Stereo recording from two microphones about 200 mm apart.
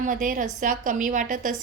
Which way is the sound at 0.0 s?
40° right (ahead or behind).